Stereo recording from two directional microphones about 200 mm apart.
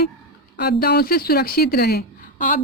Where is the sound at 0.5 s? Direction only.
50° left (ahead or behind).